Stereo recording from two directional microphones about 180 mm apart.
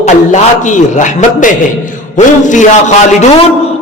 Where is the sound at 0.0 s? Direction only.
40° left (ahead or behind).